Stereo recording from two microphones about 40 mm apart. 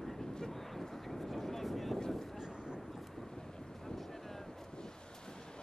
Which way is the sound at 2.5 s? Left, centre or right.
Right.